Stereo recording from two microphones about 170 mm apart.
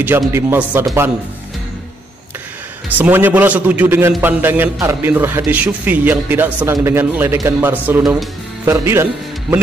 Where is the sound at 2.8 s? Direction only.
10° right (ahead or behind).